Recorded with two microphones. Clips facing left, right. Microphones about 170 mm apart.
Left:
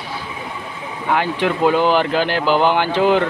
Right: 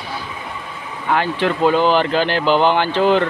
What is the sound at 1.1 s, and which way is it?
Speech, 10° left (ahead or behind).